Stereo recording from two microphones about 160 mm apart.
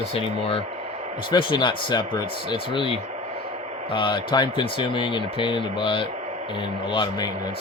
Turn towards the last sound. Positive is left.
turn(degrees=30)  # may be behind; listen again after turning